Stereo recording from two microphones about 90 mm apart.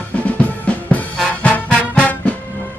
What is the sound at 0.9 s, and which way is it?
Music, 15° left (ahead or behind).